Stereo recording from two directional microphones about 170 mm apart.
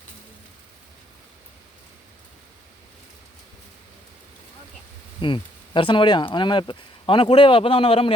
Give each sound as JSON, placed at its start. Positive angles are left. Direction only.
{"t": 5.2, "sound": "speech", "side_deg": 30}